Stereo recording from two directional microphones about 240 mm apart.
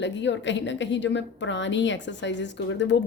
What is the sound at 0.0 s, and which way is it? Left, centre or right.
A woman's voice, left.